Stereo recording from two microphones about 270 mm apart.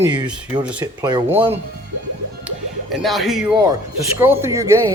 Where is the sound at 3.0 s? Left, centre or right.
Centre.